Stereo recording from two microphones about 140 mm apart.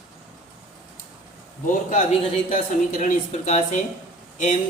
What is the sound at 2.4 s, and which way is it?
Speech, 70° left (ahead or behind).